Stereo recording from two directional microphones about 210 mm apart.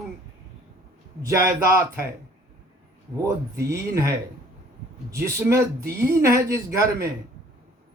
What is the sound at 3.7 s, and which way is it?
Speech, 15° right (ahead or behind).